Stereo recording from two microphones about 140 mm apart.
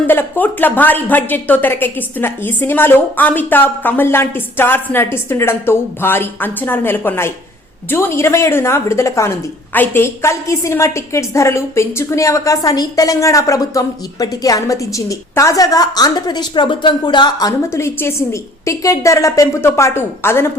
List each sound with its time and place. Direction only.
0.1 s a woman's voice: 15° left (ahead or behind)